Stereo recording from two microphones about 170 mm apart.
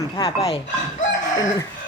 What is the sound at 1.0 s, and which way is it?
Chicken, 50° left (ahead or behind).